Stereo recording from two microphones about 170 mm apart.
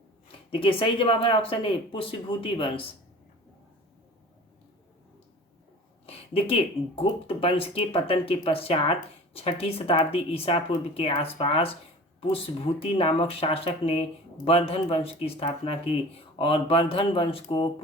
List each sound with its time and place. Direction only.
0.3 s speech: 30° left (ahead or behind)
6.1 s speech: 35° left (ahead or behind)